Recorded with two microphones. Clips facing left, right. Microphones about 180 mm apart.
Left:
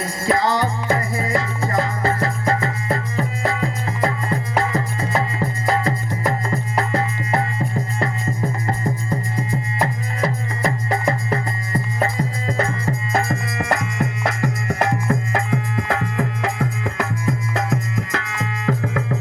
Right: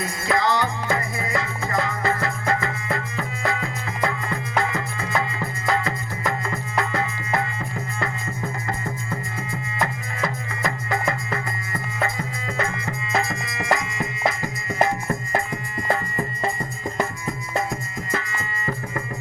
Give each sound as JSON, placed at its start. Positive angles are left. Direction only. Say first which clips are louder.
{"t": 0.0, "sound": "music", "louder": "left 3 dB", "side_deg": 35}
{"t": 8.6, "sound": "music", "louder": "left 5 dB", "side_deg": 35}
{"t": 13.1, "sound": "music", "louder": "left 2 dB", "side_deg": 55}